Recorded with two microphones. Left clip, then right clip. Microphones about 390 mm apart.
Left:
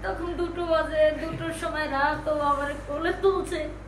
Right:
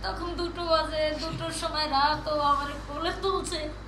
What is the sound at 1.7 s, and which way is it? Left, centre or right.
Speech, centre.